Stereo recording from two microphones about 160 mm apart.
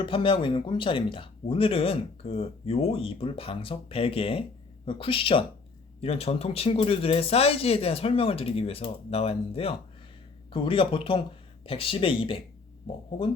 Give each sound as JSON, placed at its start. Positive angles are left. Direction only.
{"t": 0.0, "sound": "speech", "side_deg": 30}